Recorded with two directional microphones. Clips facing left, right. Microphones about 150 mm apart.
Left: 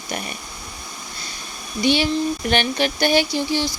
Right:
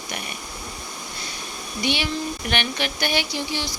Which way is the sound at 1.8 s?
35° left (ahead or behind).